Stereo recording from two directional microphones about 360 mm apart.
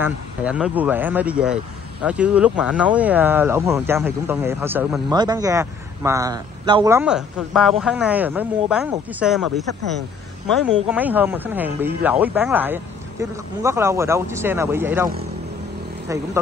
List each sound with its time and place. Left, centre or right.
0.0 s speech: centre
10.9 s speech: centre
16.1 s speech: centre